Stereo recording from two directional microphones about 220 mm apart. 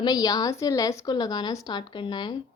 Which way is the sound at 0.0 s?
15° left (ahead or behind).